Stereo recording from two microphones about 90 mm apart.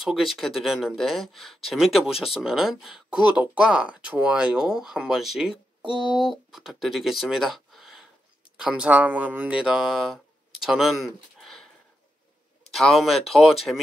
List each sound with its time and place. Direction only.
0.0 s speech: 5° right (ahead or behind)
9.7 s speech: centre (ahead or behind)
12.7 s speech: 5° left (ahead or behind)